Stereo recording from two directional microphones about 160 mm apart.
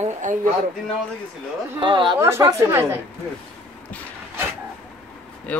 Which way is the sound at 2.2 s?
15° right (ahead or behind).